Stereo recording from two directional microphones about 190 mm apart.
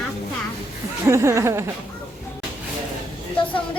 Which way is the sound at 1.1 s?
15° right (ahead or behind).